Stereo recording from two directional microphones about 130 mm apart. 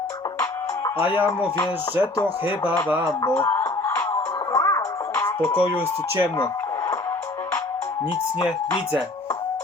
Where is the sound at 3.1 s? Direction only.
20° left (ahead or behind).